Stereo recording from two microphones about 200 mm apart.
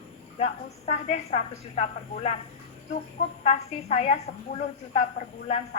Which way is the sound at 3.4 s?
35° left (ahead or behind).